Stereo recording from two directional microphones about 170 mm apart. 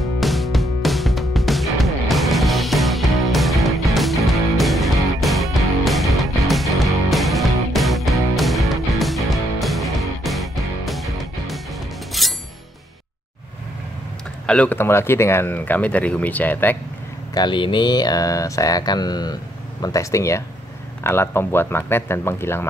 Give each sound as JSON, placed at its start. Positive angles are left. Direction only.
{"t": 0.2, "sound": "music", "side_deg": 0}
{"t": 14.4, "sound": "speech", "side_deg": 5}
{"t": 17.3, "sound": "speech", "side_deg": 25}